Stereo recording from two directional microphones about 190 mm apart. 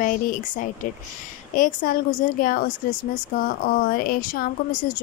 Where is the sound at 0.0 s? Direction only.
45° left (ahead or behind).